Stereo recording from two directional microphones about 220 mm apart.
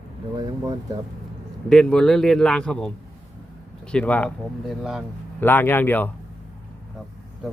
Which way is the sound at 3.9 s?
5° left (ahead or behind).